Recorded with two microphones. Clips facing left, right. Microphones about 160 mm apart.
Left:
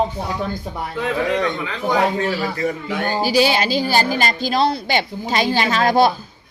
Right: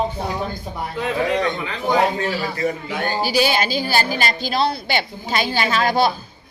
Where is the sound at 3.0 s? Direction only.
40° left (ahead or behind).